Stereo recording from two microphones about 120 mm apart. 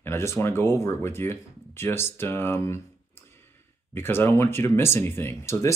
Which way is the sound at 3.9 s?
20° left (ahead or behind).